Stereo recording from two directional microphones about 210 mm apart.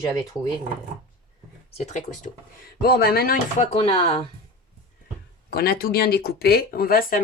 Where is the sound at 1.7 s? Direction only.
35° left (ahead or behind).